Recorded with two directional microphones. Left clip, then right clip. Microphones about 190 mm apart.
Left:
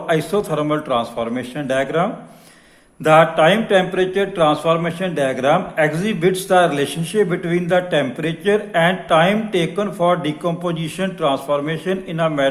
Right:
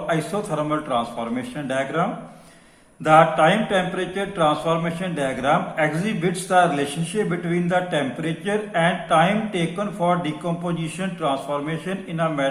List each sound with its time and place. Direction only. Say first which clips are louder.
0.1 s mantra: left 6 dB; 50° left (ahead or behind)